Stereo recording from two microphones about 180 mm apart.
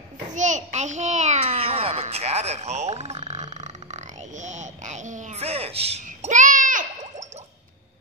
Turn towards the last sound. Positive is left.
turn(degrees=-40)  # may be behind; listen again after turning